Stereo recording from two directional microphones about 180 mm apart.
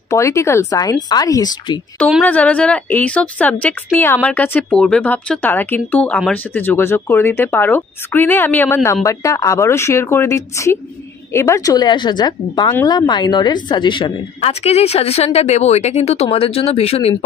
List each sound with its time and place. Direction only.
0.1 s speech: 15° left (ahead or behind)
2.0 s a woman's voice: centre (ahead or behind)
2.2 s a woman's voice: 10° left (ahead or behind); by 17.1 s 35° left (ahead or behind)